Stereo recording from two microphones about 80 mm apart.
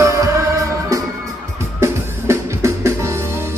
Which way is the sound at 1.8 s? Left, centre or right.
Right.